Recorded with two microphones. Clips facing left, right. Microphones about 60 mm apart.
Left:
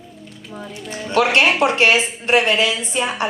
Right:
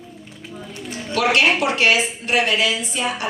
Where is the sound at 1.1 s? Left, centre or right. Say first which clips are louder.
Left 2 dB; left.